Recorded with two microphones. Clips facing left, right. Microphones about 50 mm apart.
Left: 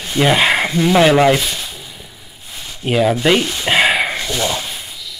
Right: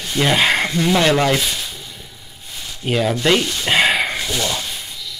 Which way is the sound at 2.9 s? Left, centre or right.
Centre.